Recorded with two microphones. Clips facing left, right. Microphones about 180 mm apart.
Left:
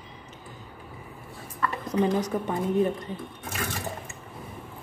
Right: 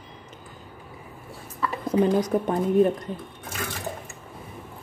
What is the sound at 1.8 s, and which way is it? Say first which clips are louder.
Speech: right 4 dB; 55° right (ahead or behind).